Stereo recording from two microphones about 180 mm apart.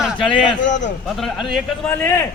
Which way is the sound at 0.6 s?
40° left (ahead or behind).